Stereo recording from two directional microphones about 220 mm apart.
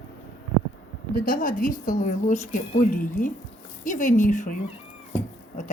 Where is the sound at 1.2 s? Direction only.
35° left (ahead or behind).